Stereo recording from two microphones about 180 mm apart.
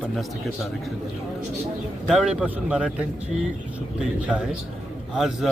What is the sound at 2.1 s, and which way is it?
A man's voice, centre (ahead or behind).